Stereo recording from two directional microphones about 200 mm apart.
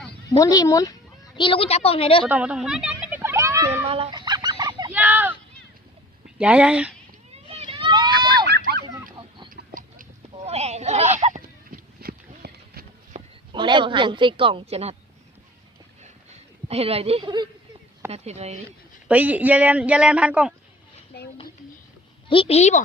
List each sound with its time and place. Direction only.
0.3 s a woman's voice: 15° left (ahead or behind)
2.2 s a sound: 5° right (ahead or behind)
3.8 s fowl: 30° right (ahead or behind)
4.9 s a sound: 10° right (ahead or behind)
6.2 s speech: 5° right (ahead or behind)
7.3 s vehicle: 30° right (ahead or behind)
8.4 s a sound: 55° right (ahead or behind)
10.3 s a sound: 30° right (ahead or behind)
11.7 s horse: 50° right (ahead or behind)
13.1 s speech: 25° right (ahead or behind)
16.6 s a woman's voice: 30° right (ahead or behind)
19.0 s speech: 5° right (ahead or behind)
22.3 s a woman's voice: 30° left (ahead or behind)